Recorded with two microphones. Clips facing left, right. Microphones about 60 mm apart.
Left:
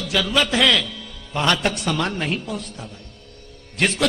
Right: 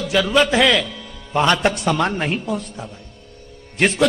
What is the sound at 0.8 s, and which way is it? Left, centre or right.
Music, centre.